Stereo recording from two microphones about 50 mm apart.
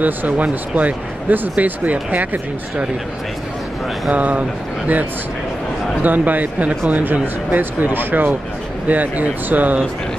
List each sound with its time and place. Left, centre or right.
0.0 s speech: right
4.1 s speech: right
6.0 s speech: right